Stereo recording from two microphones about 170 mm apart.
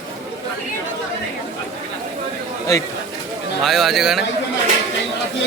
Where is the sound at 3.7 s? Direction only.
Centre (ahead or behind).